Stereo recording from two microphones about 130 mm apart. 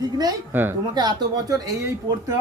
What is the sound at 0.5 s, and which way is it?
Speech, 15° right (ahead or behind).